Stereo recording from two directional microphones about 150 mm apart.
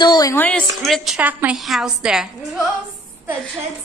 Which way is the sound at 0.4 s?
10° left (ahead or behind).